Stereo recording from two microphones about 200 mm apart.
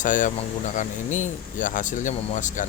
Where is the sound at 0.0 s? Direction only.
40° left (ahead or behind).